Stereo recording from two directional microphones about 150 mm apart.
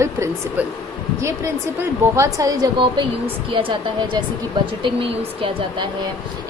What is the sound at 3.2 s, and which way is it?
Speech, 35° right (ahead or behind).